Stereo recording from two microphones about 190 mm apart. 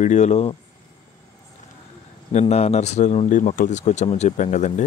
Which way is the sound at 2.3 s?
35° left (ahead or behind).